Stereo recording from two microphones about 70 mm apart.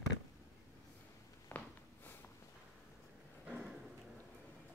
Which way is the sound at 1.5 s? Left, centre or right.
Left.